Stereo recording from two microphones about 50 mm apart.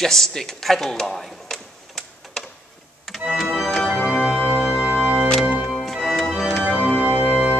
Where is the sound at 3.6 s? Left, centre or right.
Centre.